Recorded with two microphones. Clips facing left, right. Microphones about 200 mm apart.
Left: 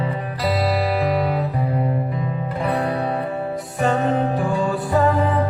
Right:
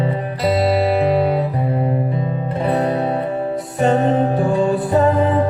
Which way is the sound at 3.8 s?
20° right (ahead or behind).